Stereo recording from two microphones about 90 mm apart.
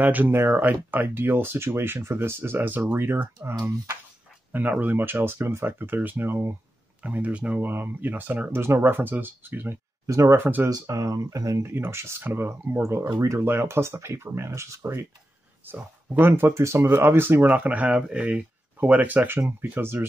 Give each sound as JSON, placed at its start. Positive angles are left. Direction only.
{"t": 0.0, "sound": "speech", "side_deg": -20}
{"t": 10.0, "sound": "speech", "side_deg": -35}
{"t": 10.4, "sound": "speech", "side_deg": -25}
{"t": 10.7, "sound": "speech", "side_deg": -40}
{"t": 11.6, "sound": "speech", "side_deg": -25}